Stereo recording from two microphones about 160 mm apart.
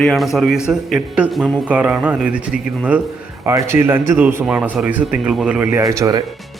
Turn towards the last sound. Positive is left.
turn(degrees=-20)  # may be behind; listen again after turning